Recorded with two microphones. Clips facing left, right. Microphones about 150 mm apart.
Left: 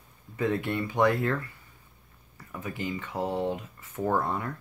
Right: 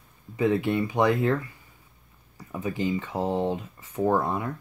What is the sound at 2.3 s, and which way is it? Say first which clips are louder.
Speech: right 6 dB; 20° right (ahead or behind).